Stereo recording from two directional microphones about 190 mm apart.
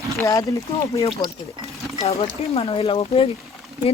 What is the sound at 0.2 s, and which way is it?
Speech, 15° left (ahead or behind).